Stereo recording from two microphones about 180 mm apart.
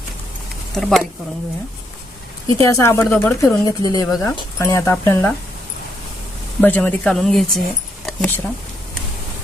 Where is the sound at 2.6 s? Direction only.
15° left (ahead or behind).